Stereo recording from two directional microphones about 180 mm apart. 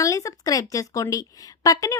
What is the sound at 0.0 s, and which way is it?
A woman's voice, 20° left (ahead or behind).